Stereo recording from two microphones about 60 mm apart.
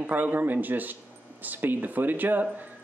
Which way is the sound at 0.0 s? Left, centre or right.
Right.